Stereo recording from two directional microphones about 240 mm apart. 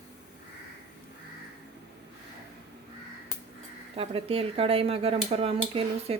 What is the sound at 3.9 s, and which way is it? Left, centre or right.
Speech, right.